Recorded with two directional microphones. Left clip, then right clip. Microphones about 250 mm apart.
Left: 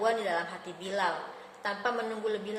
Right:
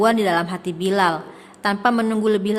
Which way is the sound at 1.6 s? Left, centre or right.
Right.